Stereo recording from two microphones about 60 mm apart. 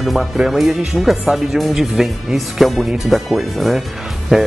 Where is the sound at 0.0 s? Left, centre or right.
Centre.